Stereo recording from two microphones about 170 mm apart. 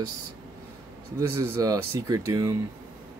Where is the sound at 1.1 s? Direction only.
15° right (ahead or behind).